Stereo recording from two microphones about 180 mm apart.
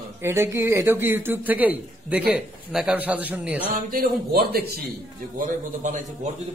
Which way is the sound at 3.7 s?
55° right (ahead or behind).